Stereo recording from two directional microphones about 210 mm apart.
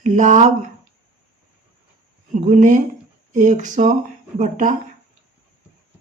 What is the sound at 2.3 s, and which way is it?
Speech, 35° right (ahead or behind).